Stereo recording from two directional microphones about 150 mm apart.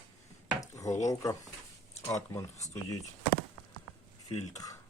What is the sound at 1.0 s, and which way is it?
Speech, 25° left (ahead or behind).